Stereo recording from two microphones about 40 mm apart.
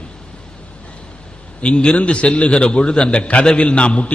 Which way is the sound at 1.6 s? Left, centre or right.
Left.